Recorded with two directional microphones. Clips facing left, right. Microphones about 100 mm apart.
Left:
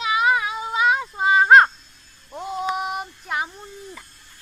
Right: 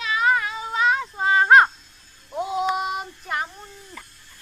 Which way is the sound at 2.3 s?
Centre (ahead or behind).